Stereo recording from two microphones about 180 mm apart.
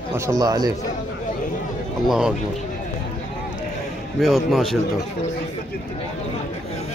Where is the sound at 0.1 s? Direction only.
15° right (ahead or behind).